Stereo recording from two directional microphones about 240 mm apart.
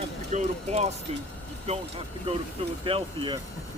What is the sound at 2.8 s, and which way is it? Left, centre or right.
Speech, right.